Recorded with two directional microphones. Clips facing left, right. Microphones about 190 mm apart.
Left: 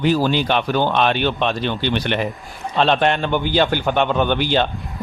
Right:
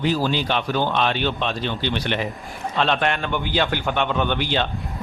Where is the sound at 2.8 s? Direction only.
30° left (ahead or behind).